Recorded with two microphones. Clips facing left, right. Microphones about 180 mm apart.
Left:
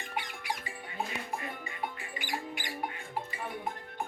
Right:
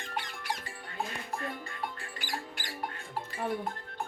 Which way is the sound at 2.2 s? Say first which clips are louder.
Left 2 dB; 20° left (ahead or behind).